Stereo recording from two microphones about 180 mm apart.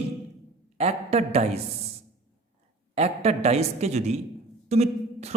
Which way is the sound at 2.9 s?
35° right (ahead or behind).